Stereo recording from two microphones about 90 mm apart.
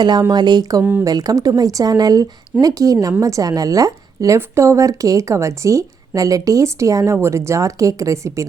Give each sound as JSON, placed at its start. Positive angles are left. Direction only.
{"t": 0.0, "sound": "speech", "side_deg": -50}
{"t": 0.8, "sound": "speech", "side_deg": -20}
{"t": 1.0, "sound": "speech", "side_deg": -45}